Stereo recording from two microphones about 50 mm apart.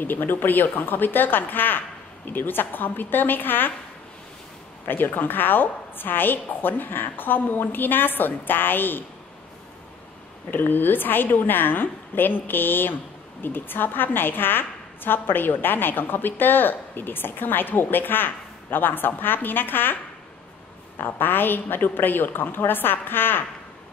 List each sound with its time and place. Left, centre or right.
0.0 s speech: left
4.8 s a woman's voice: left
10.5 s a woman's voice: left
21.0 s a woman's voice: left